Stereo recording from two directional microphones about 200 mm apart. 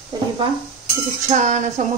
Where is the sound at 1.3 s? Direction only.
35° right (ahead or behind).